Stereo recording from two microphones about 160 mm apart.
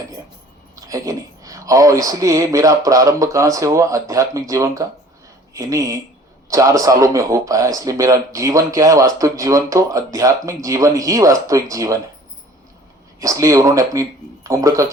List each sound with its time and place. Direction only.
0.8 s speech: 20° right (ahead or behind)
13.1 s speech: 20° right (ahead or behind)